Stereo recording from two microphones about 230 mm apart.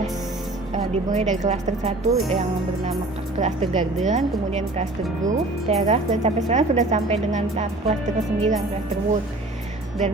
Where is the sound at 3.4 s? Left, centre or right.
Right.